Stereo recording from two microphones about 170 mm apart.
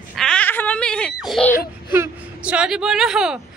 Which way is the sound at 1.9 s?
5° right (ahead or behind).